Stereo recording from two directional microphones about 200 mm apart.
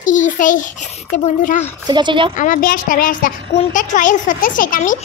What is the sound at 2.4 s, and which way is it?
A child's voice, 45° left (ahead or behind).